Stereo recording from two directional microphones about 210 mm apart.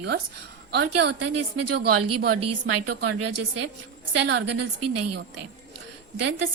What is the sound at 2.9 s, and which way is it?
Speech, 50° right (ahead or behind).